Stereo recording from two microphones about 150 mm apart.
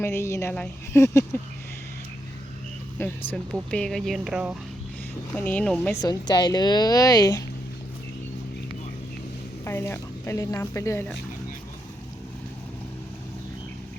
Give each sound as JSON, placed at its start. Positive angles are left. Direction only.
{"t": 0.0, "sound": "a woman's voice", "side_deg": 20}
{"t": 3.0, "sound": "a woman's voice", "side_deg": 15}
{"t": 5.3, "sound": "a woman's voice", "side_deg": 10}
{"t": 9.6, "sound": "a woman's voice", "side_deg": 15}